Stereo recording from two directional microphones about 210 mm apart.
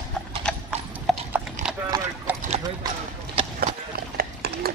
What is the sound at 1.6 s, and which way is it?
Clip-clop, 35° right (ahead or behind).